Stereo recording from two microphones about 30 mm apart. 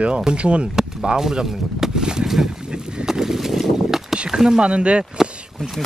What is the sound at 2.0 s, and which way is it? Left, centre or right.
Boat, right.